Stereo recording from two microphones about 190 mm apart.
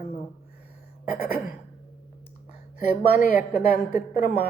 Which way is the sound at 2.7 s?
45° left (ahead or behind).